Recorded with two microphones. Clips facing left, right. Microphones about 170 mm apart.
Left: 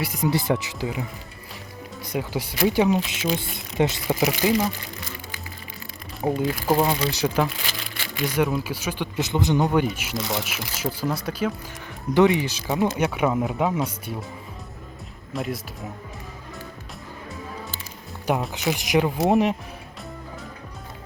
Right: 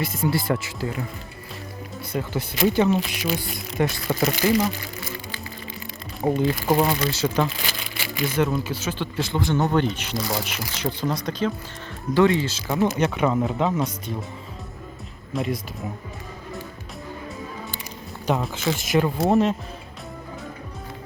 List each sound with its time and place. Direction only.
0.0 s speech: 15° left (ahead or behind)
2.1 s speech: 10° left (ahead or behind)
6.2 s speech: centre (ahead or behind)
7.7 s crumpling: 5° right (ahead or behind)
8.4 s speech: 5° left (ahead or behind)
15.3 s speech: centre (ahead or behind)
18.5 s speech: 15° left (ahead or behind)